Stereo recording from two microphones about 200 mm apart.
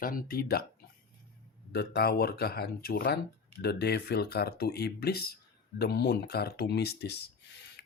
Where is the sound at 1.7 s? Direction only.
55° left (ahead or behind).